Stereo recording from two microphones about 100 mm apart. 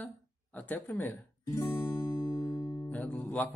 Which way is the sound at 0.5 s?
15° left (ahead or behind).